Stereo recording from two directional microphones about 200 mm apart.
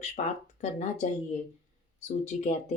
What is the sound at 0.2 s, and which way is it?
Speech, 35° left (ahead or behind).